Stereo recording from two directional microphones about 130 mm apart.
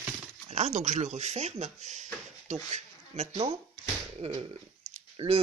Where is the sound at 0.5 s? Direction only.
60° right (ahead or behind).